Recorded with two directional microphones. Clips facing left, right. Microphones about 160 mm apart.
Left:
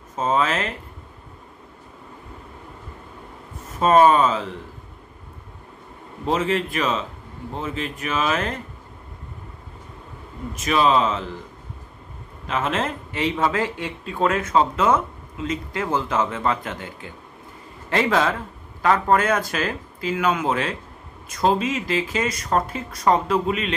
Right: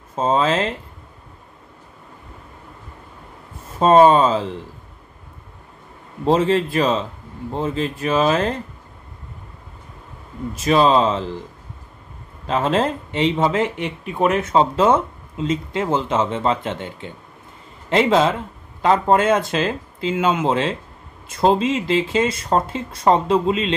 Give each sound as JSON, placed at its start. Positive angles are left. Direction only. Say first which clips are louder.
{"t": 0.1, "sound": "speech", "louder": "right 3 dB", "side_deg": -30}
{"t": 3.8, "sound": "speech", "louder": "right 3 dB", "side_deg": -30}
{"t": 6.2, "sound": "speech", "louder": "right 5 dB", "side_deg": -30}
{"t": 10.5, "sound": "speech", "louder": "right 4 dB", "side_deg": -30}
{"t": 12.4, "sound": "speech", "louder": "right 5 dB", "side_deg": -30}